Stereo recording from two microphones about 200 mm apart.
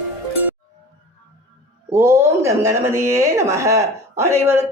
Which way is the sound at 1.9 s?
15° right (ahead or behind).